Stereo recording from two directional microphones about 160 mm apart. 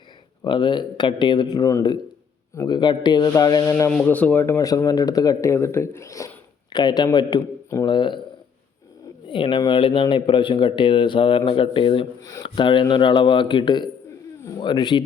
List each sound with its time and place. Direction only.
0.4 s speech: 30° left (ahead or behind)
3.7 s speech: 15° left (ahead or behind); by 8.2 s 30° left (ahead or behind)
9.3 s speech: 30° left (ahead or behind)